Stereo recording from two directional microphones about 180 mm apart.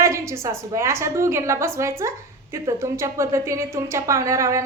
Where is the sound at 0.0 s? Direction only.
15° right (ahead or behind).